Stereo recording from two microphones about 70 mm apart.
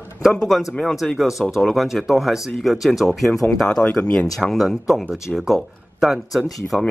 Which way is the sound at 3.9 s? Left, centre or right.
Centre.